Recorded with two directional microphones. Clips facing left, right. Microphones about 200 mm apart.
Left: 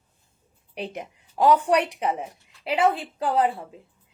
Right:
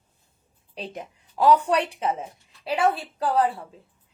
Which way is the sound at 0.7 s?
15° left (ahead or behind).